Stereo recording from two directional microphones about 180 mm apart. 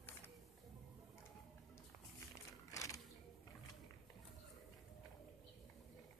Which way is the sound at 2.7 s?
20° left (ahead or behind).